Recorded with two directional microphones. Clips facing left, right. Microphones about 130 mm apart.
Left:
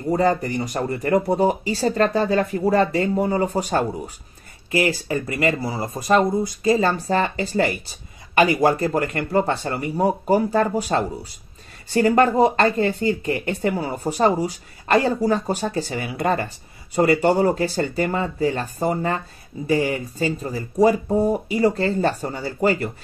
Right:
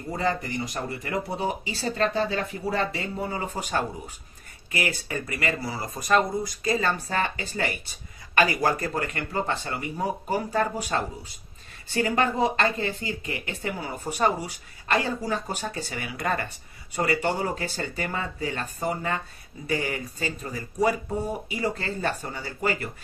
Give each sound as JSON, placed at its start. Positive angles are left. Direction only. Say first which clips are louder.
{"t": 0.1, "sound": "speech", "louder": "left 8 dB", "side_deg": 40}
{"t": 8.4, "sound": "speech", "louder": "left 6 dB", "side_deg": 25}
{"t": 14.1, "sound": "speech", "louder": "left 5 dB", "side_deg": 30}